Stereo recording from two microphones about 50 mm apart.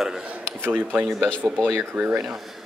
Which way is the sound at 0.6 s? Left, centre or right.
Right.